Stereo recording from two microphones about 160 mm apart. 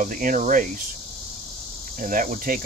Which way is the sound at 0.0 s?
60° right (ahead or behind).